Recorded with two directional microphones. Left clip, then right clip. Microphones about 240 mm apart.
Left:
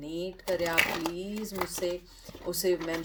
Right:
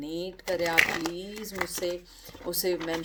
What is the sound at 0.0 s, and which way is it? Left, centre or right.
Speech, right.